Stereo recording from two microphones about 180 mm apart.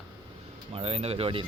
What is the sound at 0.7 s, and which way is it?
Speech, 35° right (ahead or behind).